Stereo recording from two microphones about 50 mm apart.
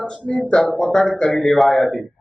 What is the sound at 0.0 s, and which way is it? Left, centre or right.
Speech, left.